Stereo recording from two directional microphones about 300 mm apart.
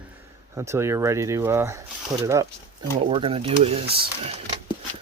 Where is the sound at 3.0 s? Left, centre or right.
Centre.